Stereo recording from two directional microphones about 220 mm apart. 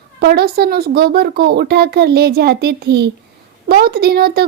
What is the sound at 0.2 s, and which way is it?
Speech, 45° right (ahead or behind).